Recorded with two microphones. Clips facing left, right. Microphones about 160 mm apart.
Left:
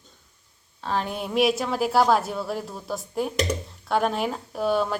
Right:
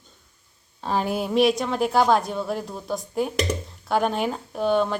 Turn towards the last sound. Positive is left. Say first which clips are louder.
# right 2 dB
turn(degrees=5)  # may be behind; listen again after turning